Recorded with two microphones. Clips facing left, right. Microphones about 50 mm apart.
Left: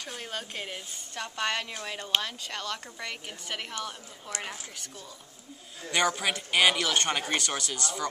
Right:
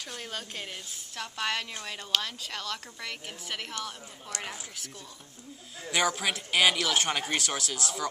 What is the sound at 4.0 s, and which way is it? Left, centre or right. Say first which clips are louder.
Speech: right 1 dB; centre.